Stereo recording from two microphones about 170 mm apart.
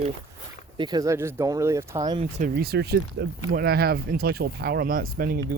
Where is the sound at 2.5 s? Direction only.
70° right (ahead or behind).